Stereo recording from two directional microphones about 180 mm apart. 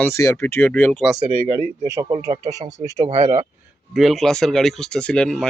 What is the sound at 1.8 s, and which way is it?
Speech, 15° right (ahead or behind).